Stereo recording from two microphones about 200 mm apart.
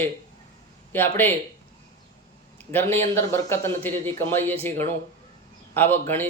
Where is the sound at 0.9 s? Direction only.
10° left (ahead or behind).